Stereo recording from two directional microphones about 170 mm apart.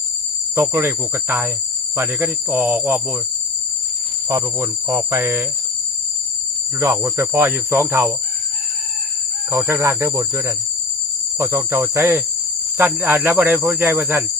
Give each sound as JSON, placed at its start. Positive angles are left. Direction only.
{"t": 0.5, "sound": "cricket", "side_deg": -15}
{"t": 4.3, "sound": "cricket", "side_deg": -20}
{"t": 6.7, "sound": "cricket", "side_deg": -15}
{"t": 9.5, "sound": "cricket", "side_deg": -15}